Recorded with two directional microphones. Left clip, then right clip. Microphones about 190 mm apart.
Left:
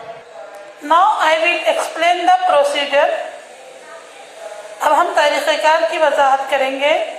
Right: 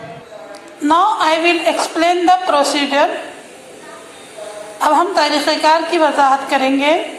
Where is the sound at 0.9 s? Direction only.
55° right (ahead or behind).